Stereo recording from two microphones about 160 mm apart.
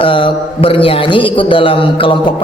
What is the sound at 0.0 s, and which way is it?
A man's voice, 35° left (ahead or behind).